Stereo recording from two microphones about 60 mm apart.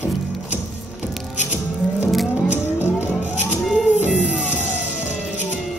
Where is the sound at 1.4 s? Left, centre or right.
Right.